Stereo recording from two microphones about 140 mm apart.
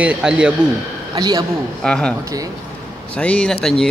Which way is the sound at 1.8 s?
5° left (ahead or behind).